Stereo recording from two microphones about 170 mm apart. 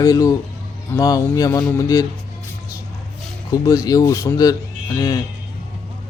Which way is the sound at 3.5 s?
20° left (ahead or behind).